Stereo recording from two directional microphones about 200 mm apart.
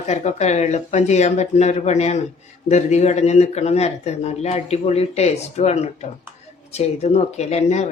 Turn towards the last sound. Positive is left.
turn(degrees=35)  # may be behind; listen again after turning